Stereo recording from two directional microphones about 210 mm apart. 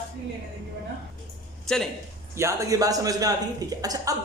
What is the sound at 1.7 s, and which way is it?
Speech, centre (ahead or behind).